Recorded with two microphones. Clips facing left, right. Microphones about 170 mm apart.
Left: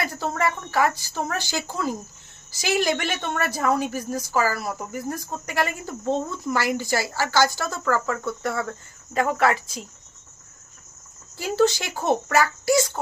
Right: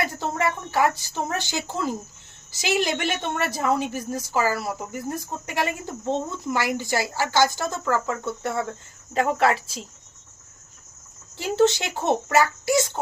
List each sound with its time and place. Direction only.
0.0 s a woman's voice: 20° right (ahead or behind)
11.3 s a woman's voice: 25° right (ahead or behind)